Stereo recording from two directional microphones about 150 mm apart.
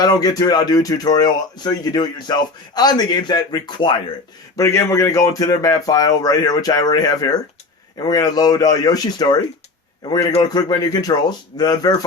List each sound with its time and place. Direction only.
0.0 s speech: 25° left (ahead or behind)